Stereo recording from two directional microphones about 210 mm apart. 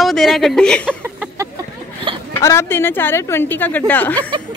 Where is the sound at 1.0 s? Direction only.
10° right (ahead or behind).